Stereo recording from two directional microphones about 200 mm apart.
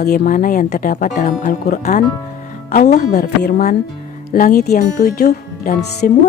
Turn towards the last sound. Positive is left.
turn(degrees=50)  # may be behind; listen again after turning